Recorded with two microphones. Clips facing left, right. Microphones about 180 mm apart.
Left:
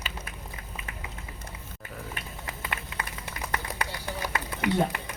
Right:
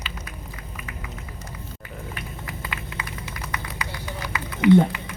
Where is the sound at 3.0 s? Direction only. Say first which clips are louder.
Right 1 dB; 55° left (ahead or behind).